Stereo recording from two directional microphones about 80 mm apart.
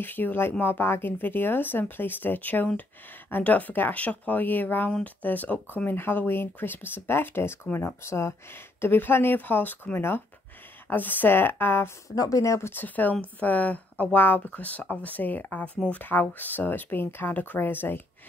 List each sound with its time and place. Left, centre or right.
0.0 s speech: left
12.2 s speech: left
12.7 s speech: left